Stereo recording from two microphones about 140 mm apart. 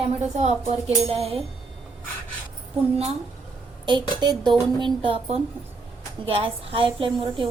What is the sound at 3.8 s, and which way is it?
A woman's voice, 35° right (ahead or behind).